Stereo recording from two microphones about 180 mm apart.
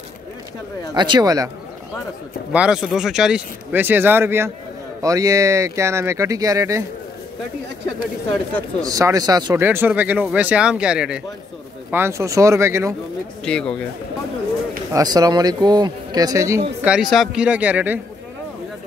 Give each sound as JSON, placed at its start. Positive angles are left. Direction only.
{"t": 0.9, "sound": "speech", "side_deg": -25}
{"t": 2.5, "sound": "speech", "side_deg": -5}
{"t": 8.8, "sound": "speech", "side_deg": -20}
{"t": 11.9, "sound": "speech", "side_deg": -15}
{"t": 13.5, "sound": "speech", "side_deg": 5}
{"t": 14.9, "sound": "speech", "side_deg": -20}
{"t": 16.8, "sound": "speech", "side_deg": -5}